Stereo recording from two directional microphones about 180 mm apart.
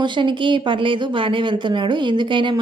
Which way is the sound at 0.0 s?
25° right (ahead or behind).